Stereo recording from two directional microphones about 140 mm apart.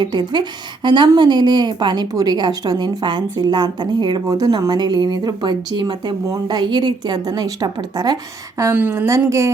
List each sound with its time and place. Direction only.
0.0 s a woman's voice: 30° right (ahead or behind)